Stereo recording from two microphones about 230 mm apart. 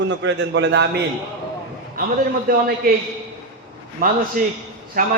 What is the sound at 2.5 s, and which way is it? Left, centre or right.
Speech, right.